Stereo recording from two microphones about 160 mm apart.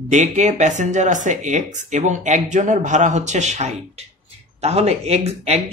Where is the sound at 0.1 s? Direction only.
50° right (ahead or behind).